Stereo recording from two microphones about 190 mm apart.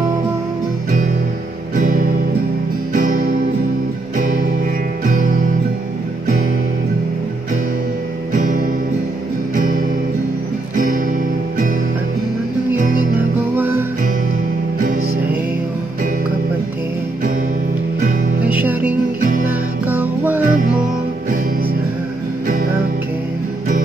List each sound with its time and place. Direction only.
1.8 s music: 45° right (ahead or behind)
8.3 s music: 45° right (ahead or behind)
13.6 s music: 10° right (ahead or behind)
18.4 s music: 10° right (ahead or behind)